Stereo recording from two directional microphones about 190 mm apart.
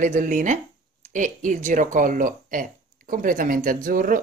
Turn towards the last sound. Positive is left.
turn(degrees=-45)  # may be behind; listen again after turning